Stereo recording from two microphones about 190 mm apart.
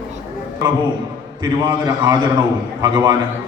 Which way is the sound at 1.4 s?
20° right (ahead or behind).